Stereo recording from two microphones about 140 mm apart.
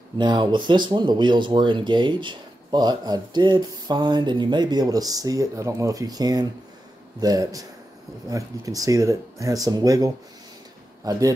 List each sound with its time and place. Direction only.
0.2 s speech: 35° right (ahead or behind)